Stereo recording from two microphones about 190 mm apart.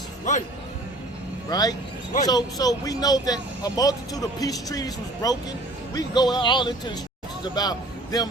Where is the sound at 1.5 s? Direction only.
20° left (ahead or behind).